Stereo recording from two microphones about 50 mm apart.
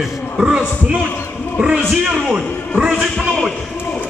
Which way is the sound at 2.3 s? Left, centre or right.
Centre.